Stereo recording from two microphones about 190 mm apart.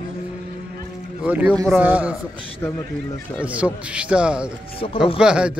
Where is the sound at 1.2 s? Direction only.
10° right (ahead or behind).